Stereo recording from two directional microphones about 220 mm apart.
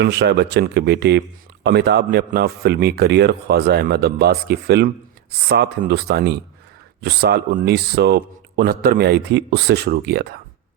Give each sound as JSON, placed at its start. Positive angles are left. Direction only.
{"t": 0.0, "sound": "speech", "side_deg": -50}